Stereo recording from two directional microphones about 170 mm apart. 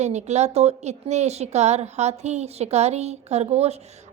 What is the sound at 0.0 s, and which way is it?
A woman's voice, 40° right (ahead or behind).